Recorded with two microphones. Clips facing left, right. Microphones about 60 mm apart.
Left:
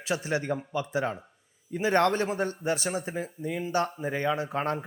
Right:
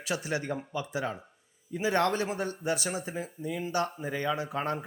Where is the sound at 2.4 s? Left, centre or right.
Left.